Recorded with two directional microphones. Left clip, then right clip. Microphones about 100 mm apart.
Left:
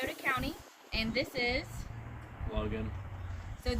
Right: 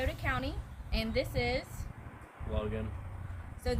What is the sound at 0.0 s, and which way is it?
A woman's voice, 40° right (ahead or behind).